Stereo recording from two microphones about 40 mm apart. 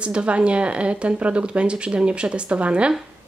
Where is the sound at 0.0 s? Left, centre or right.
Right.